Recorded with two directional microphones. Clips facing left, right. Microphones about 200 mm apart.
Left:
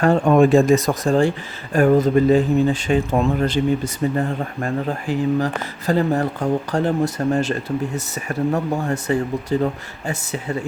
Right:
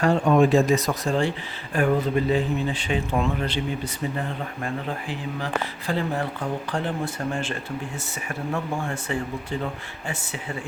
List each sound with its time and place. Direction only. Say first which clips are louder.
0.0 s speech: left 4 dB; 50° left (ahead or behind)